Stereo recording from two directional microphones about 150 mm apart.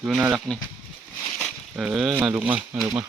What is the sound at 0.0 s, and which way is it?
Speech, 5° right (ahead or behind).